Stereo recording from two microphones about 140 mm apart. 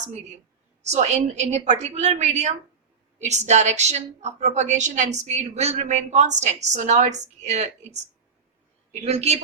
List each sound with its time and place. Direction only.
0.8 s a woman's voice: 55° right (ahead or behind)